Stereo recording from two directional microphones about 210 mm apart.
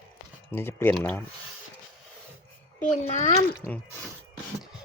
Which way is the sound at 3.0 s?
30° left (ahead or behind).